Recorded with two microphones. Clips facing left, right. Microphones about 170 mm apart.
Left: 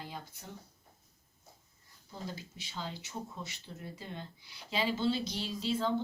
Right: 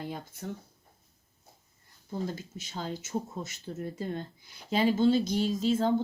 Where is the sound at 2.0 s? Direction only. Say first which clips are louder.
Right 8 dB; 45° right (ahead or behind).